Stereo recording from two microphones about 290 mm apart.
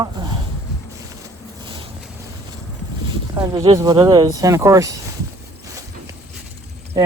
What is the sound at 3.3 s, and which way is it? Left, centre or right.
Speech, centre.